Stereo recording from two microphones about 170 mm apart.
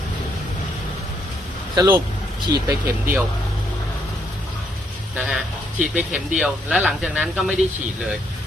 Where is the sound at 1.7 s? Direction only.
20° right (ahead or behind).